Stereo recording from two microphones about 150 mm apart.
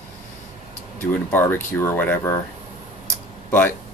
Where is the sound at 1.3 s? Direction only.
15° left (ahead or behind).